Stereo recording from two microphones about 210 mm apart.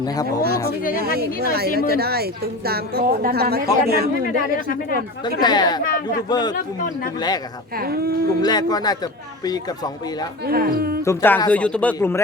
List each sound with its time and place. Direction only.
0.0 s speech: 15° left (ahead or behind)
1.0 s speech: 50° right (ahead or behind)
5.4 s speech: 20° left (ahead or behind)
6.5 s a man's voice: 40° left (ahead or behind)
7.8 s speech: 45° right (ahead or behind)
8.4 s speech: 20° left (ahead or behind)
10.4 s speech: 45° right (ahead or behind)
11.0 s speech: 10° left (ahead or behind)